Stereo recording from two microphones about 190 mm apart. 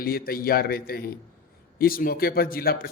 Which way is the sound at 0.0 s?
50° left (ahead or behind).